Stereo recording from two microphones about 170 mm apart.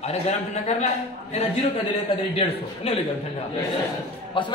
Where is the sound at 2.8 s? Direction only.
35° left (ahead or behind).